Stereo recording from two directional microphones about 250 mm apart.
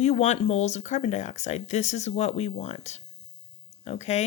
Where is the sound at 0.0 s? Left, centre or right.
Left.